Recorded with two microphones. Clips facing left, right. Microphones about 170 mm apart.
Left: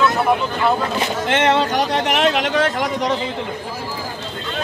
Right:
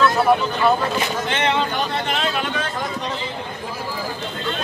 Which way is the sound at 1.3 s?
80° left.